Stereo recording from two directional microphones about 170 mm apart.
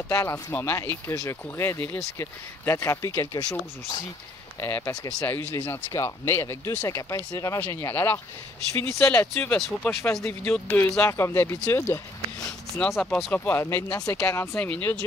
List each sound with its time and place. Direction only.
0.1 s speech: 15° left (ahead or behind)
12.4 s speech: 5° left (ahead or behind)